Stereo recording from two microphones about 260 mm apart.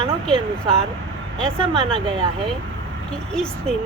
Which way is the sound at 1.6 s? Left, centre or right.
Right.